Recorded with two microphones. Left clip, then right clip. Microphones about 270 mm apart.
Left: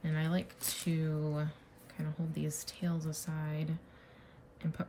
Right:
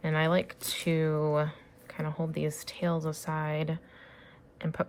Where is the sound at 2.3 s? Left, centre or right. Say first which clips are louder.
Right 8 dB; centre.